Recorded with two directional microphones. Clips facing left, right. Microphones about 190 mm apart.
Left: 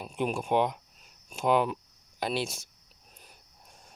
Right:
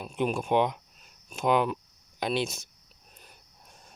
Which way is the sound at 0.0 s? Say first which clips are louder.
Right 2 dB; 5° left (ahead or behind).